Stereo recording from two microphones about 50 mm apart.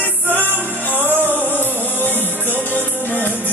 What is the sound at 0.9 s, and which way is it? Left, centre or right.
Music, right.